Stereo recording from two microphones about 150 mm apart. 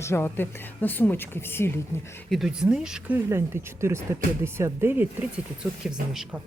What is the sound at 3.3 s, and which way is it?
Speech, 15° right (ahead or behind).